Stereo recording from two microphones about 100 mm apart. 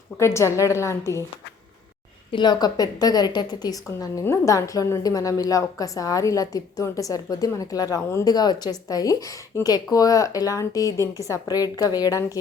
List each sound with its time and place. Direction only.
0.2 s a woman's voice: 30° left (ahead or behind)
2.3 s a woman's voice: 45° left (ahead or behind)